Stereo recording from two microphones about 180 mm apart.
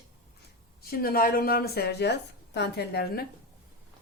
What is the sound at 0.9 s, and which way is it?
A woman's voice, 55° left (ahead or behind).